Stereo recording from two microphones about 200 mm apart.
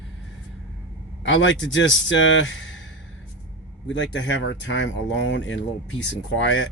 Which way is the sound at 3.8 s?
65° left (ahead or behind).